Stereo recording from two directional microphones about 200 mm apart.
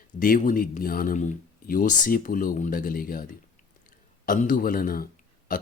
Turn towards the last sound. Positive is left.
turn(degrees=45)  # may be behind; listen again after turning